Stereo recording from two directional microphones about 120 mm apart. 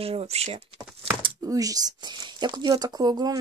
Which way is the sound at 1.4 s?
30° right (ahead or behind).